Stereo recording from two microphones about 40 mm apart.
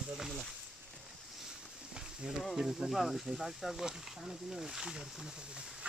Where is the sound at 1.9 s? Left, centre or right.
Centre.